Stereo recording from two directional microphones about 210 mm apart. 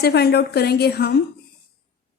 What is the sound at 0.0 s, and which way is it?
A woman's voice, 50° left (ahead or behind).